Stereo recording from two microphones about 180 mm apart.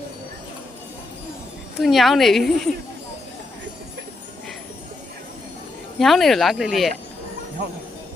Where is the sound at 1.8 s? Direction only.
Centre (ahead or behind).